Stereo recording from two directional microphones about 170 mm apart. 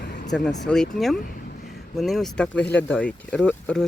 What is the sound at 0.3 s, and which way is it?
Speech, centre (ahead or behind).